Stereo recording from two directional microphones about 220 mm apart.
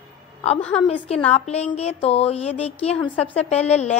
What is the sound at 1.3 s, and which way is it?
Speech, 30° left (ahead or behind).